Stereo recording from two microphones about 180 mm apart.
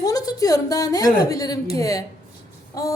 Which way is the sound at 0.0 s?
20° left (ahead or behind).